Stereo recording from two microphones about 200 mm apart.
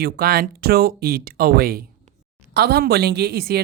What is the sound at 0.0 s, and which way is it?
Speech, 50° right (ahead or behind).